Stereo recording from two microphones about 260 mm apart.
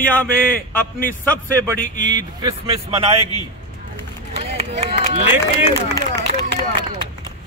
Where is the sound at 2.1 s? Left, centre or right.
Centre.